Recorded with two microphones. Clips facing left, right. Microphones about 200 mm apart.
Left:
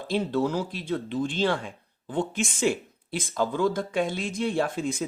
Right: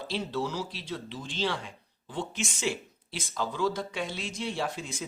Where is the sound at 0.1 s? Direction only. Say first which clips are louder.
Left 7 dB; 55° left (ahead or behind).